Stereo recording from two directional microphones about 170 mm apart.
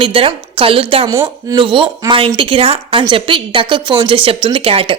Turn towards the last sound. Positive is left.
turn(degrees=-35)  # may be behind; listen again after turning